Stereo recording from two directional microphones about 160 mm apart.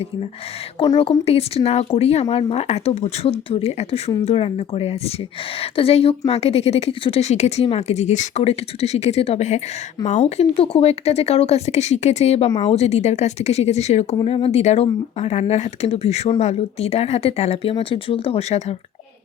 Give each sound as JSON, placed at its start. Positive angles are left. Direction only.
{"t": 0.8, "sound": "a woman's voice", "side_deg": 35}